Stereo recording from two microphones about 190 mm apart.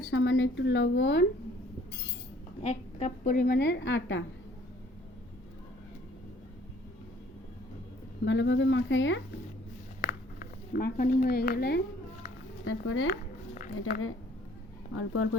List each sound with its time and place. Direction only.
0.0 s a woman's voice: 90° left; by 1.2 s 70° left (ahead or behind)
2.6 s a woman's voice: 40° left (ahead or behind); by 4.2 s 70° left (ahead or behind)
8.2 s speech: 70° left (ahead or behind)
10.0 s a sound: 50° left (ahead or behind)
12.6 s speech: 90° left
13.1 s a sound: 45° left (ahead or behind)
14.9 s speech: 90° left